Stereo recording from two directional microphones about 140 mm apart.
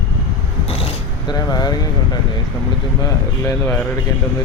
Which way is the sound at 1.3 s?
30° left (ahead or behind).